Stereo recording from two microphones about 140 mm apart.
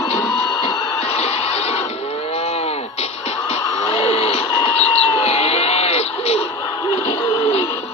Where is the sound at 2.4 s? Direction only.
50° left (ahead or behind).